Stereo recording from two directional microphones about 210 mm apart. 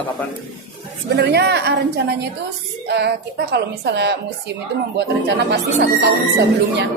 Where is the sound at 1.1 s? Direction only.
50° right (ahead or behind).